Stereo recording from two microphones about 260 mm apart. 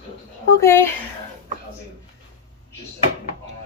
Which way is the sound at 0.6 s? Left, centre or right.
Centre.